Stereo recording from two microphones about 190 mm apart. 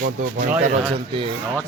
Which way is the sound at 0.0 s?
45° right (ahead or behind).